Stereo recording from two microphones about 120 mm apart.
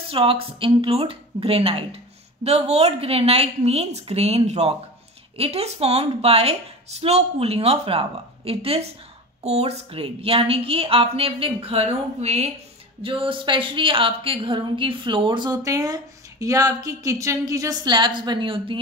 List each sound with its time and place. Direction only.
0.1 s a woman's voice: 50° right (ahead or behind); by 12.5 s 65° right (ahead or behind)
13.0 s a woman's voice: 45° right (ahead or behind)